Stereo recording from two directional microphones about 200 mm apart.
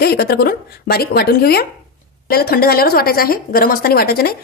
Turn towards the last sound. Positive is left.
turn(degrees=50)  # may be behind; listen again after turning